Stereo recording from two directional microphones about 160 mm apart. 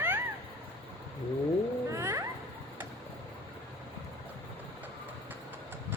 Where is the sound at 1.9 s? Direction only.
15° right (ahead or behind).